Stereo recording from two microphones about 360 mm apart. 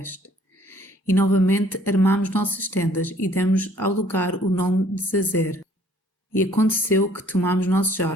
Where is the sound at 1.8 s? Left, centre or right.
Centre.